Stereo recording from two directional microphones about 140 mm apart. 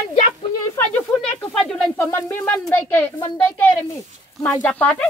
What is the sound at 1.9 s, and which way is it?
Speech, 15° left (ahead or behind).